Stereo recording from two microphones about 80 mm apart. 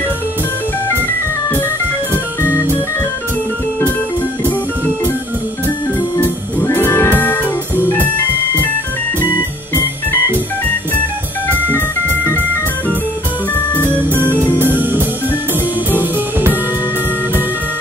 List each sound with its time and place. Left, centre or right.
2.4 s organ: right
6.2 s music: left
7.8 s organ: left
13.8 s music: right